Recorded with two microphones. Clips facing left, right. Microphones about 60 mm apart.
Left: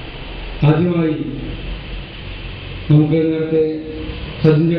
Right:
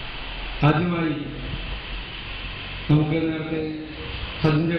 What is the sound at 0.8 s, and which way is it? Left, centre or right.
Speech, centre.